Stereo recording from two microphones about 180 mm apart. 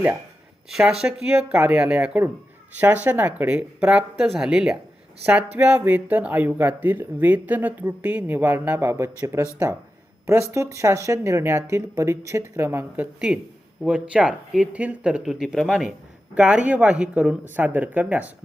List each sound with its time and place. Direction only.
0.7 s speech: 5° right (ahead or behind)
10.5 s speech: 15° right (ahead or behind)